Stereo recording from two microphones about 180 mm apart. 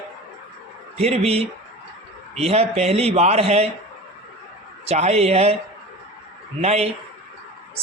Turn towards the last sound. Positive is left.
turn(degrees=-35)  # may be behind; listen again after turning